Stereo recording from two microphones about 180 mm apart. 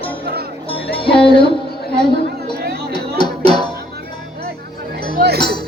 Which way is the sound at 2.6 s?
60° right (ahead or behind).